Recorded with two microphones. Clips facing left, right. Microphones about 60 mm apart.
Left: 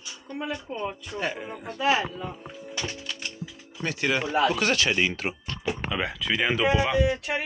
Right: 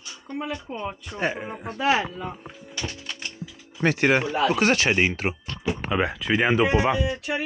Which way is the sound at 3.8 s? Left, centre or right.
Right.